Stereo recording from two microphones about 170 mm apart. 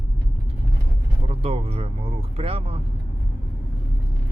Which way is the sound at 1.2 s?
35° right (ahead or behind).